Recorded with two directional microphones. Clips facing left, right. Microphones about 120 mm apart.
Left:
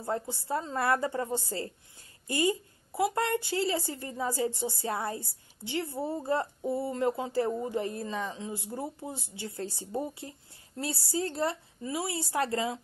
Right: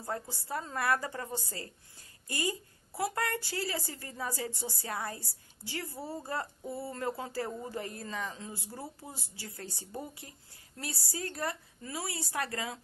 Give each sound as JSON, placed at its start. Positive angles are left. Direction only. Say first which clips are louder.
{"t": 0.0, "sound": "a woman's voice", "louder": "left 5 dB", "side_deg": 25}